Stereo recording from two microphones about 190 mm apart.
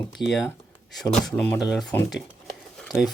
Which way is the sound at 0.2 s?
Centre (ahead or behind).